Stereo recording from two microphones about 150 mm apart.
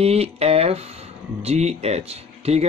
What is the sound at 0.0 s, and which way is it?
Speech, 40° right (ahead or behind).